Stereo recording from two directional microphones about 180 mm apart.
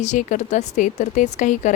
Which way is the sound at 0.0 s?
45° left (ahead or behind).